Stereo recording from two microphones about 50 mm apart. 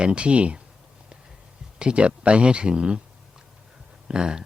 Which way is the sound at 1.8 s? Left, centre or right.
Right.